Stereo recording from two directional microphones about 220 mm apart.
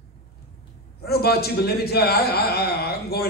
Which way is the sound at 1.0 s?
45° left (ahead or behind).